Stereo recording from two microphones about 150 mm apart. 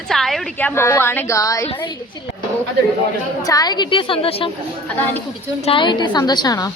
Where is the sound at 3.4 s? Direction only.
25° left (ahead or behind).